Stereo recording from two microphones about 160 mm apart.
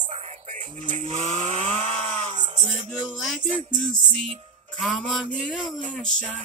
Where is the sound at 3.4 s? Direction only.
50° right (ahead or behind).